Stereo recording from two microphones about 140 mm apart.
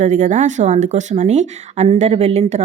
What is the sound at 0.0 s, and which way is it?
A woman's voice, 60° right (ahead or behind).